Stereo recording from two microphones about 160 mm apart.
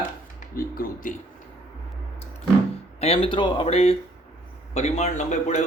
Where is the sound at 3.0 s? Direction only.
35° left (ahead or behind).